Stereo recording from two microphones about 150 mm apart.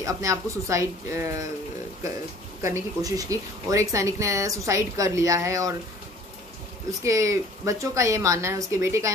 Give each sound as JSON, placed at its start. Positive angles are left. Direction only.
{"t": 0.0, "sound": "speech", "side_deg": -20}
{"t": 2.7, "sound": "speech", "side_deg": -25}
{"t": 6.9, "sound": "speech", "side_deg": -20}